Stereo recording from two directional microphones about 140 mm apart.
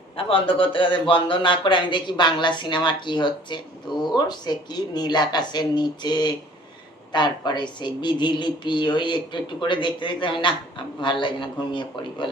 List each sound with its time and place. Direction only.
0.2 s a woman's voice: 40° left (ahead or behind)